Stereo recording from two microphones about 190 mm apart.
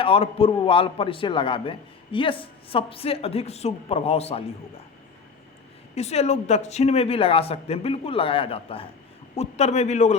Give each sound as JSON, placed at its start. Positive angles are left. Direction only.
{"t": 0.0, "sound": "a man's voice", "side_deg": 30}
{"t": 5.9, "sound": "speech", "side_deg": 35}